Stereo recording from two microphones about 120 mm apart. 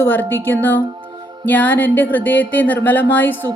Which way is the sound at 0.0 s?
15° left (ahead or behind).